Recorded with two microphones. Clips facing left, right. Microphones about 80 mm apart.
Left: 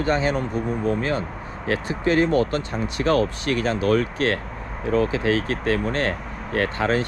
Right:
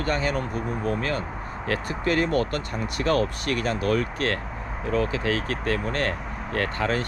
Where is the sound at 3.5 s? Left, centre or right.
Left.